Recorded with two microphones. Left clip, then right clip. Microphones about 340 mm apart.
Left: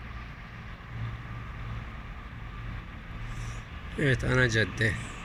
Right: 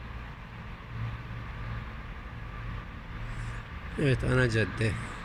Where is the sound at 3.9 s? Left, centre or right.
Centre.